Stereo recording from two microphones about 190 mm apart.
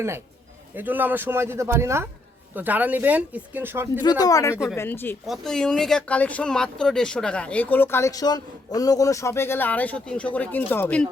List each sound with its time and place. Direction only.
0.8 s speech: 10° right (ahead or behind)
4.2 s speech: 20° left (ahead or behind)